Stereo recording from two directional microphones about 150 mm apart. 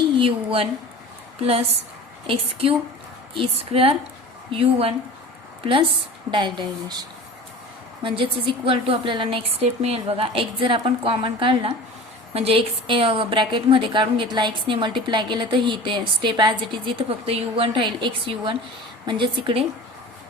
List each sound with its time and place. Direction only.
0.2 s a woman's voice: 40° right (ahead or behind)
2.2 s a woman's voice: 40° right (ahead or behind)
6.3 s a woman's voice: 30° right (ahead or behind)
8.0 s a woman's voice: 35° right (ahead or behind)